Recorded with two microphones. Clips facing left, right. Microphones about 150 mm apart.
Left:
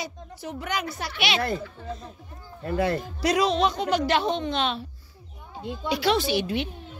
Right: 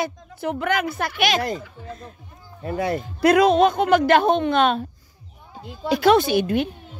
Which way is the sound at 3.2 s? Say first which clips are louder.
Right 8 dB; 55° right (ahead or behind).